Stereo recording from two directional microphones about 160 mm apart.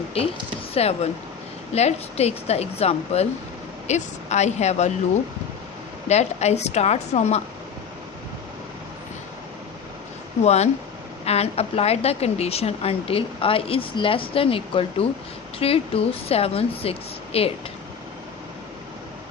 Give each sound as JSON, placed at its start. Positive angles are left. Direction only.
{"t": 0.7, "sound": "a woman's voice", "side_deg": 40}
{"t": 6.1, "sound": "a woman's voice", "side_deg": 45}
{"t": 10.4, "sound": "a woman's voice", "side_deg": 45}